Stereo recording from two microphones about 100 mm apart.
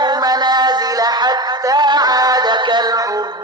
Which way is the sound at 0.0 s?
40° right (ahead or behind).